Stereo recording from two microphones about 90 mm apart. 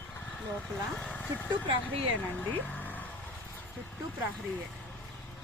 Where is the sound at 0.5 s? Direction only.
10° left (ahead or behind).